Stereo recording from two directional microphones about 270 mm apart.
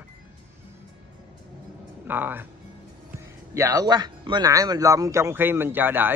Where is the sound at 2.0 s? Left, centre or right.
Centre.